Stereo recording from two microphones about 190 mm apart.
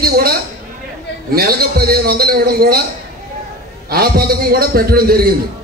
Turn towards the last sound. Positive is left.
turn(degrees=-50)  # may be behind; listen again after turning